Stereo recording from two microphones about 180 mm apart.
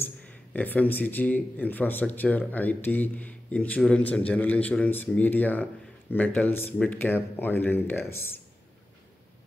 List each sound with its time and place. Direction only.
0.0 s a man's voice: 10° left (ahead or behind)